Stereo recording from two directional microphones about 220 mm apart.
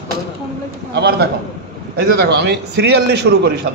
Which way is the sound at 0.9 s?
50° right (ahead or behind).